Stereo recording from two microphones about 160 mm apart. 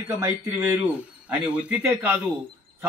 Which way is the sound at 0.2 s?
20° right (ahead or behind).